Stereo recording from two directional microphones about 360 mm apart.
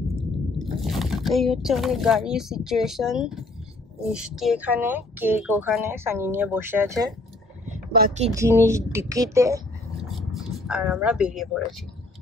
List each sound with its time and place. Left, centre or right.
0.7 s speech: centre
7.6 s a sound: right
8.4 s speech: centre